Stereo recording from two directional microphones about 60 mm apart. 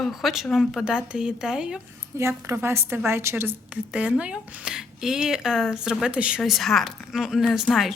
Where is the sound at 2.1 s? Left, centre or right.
Right.